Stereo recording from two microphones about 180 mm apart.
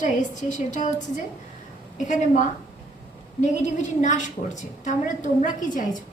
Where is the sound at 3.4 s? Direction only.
40° left (ahead or behind).